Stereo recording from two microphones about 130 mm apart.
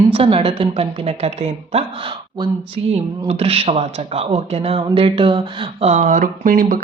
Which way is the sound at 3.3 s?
50° right (ahead or behind).